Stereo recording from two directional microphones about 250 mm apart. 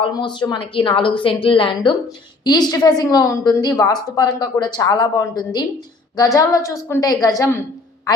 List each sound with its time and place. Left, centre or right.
0.0 s a woman's voice: centre